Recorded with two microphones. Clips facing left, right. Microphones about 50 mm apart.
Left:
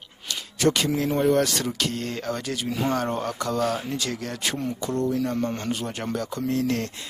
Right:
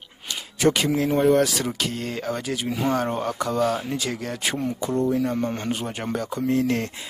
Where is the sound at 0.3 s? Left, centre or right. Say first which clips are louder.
Right 2 dB; centre.